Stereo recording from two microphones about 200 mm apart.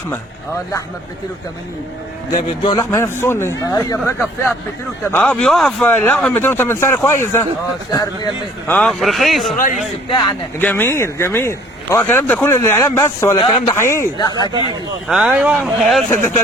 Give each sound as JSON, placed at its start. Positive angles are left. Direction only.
{"t": 2.3, "sound": "speech", "side_deg": 20}
{"t": 10.6, "sound": "speech", "side_deg": 10}
{"t": 15.0, "sound": "speech", "side_deg": -5}